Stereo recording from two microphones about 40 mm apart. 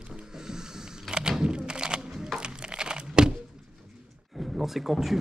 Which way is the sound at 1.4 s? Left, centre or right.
Centre.